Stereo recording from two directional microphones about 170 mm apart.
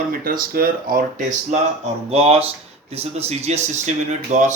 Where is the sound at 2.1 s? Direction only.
35° right (ahead or behind).